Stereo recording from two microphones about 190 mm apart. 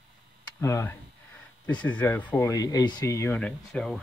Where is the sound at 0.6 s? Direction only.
15° left (ahead or behind).